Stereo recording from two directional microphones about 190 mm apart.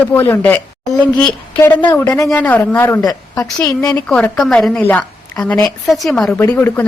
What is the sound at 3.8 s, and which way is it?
Speech, 15° left (ahead or behind).